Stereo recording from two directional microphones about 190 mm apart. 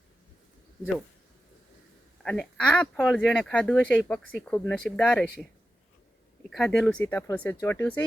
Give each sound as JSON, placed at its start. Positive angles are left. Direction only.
{"t": 2.2, "sound": "speech", "side_deg": 5}
{"t": 6.5, "sound": "speech", "side_deg": 0}